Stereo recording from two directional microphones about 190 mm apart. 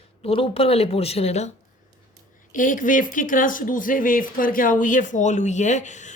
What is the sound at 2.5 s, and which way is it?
A woman's voice, 45° left (ahead or behind).